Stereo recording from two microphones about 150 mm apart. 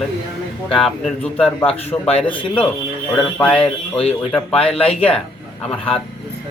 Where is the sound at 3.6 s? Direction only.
40° left (ahead or behind).